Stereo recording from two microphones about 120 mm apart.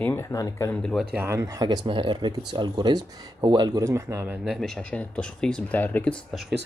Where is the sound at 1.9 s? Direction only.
45° right (ahead or behind).